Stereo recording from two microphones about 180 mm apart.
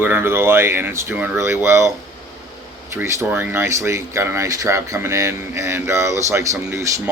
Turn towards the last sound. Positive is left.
turn(degrees=-15)  # may be behind; listen again after turning